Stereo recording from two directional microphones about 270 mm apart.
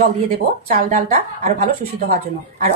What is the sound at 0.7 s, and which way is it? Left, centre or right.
A woman's voice, right.